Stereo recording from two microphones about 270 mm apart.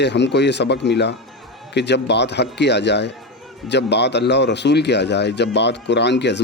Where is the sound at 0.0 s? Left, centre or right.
Left.